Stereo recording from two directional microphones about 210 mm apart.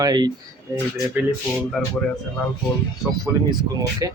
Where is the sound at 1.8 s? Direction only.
Centre (ahead or behind).